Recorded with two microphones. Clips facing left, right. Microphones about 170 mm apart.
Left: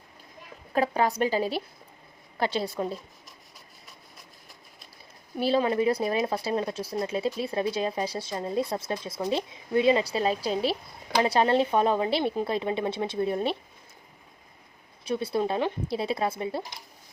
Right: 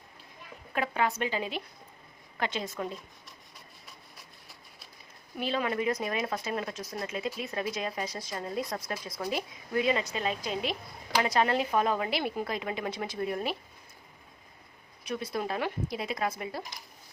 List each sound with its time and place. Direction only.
0.7 s speech: 35° left (ahead or behind)
5.4 s speech: 30° left (ahead or behind)
15.0 s speech: 30° left (ahead or behind)